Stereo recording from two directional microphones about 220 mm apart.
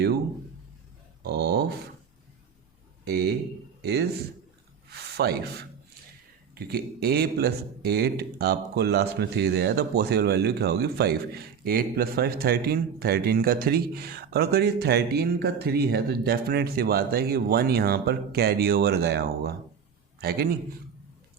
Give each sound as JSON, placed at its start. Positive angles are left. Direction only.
{"t": 1.2, "sound": "speech", "side_deg": -45}
{"t": 3.0, "sound": "speech", "side_deg": -45}
{"t": 5.1, "sound": "a man's voice", "side_deg": -45}